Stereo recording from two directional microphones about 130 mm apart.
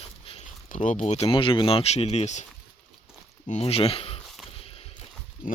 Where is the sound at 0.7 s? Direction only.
75° left (ahead or behind); by 2.4 s 60° left (ahead or behind).